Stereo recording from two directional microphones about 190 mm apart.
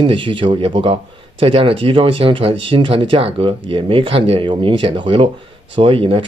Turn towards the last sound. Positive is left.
turn(degrees=-30)  # may be behind; listen again after turning